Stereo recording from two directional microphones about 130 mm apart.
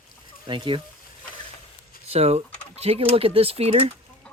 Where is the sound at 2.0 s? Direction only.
50° right (ahead or behind).